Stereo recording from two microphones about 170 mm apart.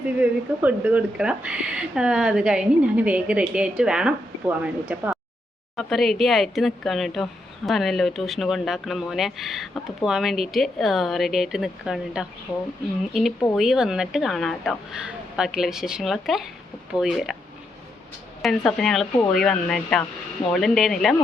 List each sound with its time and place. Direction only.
0.2 s speech: 10° right (ahead or behind)
13.6 s speech: 5° right (ahead or behind)
18.4 s speech: centre (ahead or behind)